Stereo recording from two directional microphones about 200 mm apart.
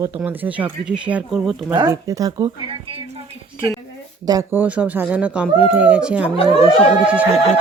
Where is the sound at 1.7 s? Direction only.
15° right (ahead or behind).